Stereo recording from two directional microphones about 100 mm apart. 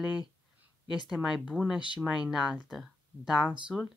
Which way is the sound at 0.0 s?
45° left (ahead or behind).